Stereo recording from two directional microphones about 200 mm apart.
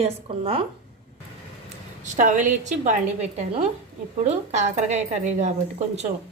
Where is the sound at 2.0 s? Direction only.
40° right (ahead or behind).